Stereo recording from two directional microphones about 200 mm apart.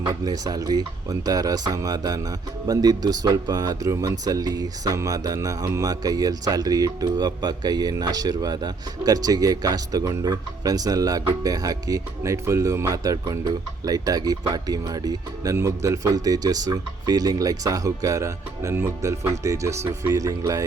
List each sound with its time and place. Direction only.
0.1 s speech: 20° right (ahead or behind)